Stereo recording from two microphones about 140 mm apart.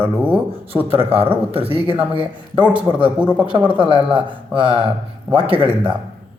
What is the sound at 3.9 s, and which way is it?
Speech, 35° right (ahead or behind).